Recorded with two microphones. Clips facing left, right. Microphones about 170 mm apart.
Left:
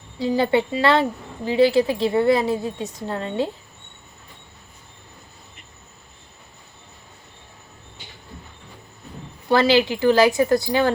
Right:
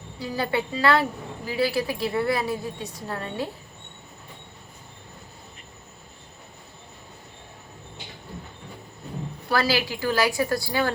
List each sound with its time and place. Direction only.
0.2 s a woman's voice: 25° left (ahead or behind)
9.5 s a woman's voice: 25° left (ahead or behind)